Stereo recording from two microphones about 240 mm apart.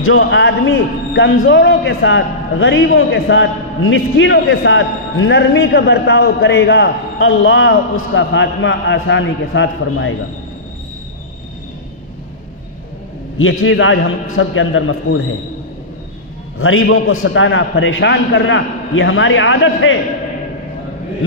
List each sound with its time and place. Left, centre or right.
0.0 s a man's voice: left
13.4 s a man's voice: left
16.5 s a man's voice: left